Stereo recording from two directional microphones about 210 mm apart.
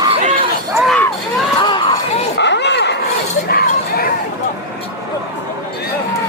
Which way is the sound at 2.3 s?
55° left (ahead or behind).